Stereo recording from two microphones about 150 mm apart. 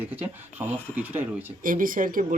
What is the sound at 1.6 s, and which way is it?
Speech, 65° right (ahead or behind).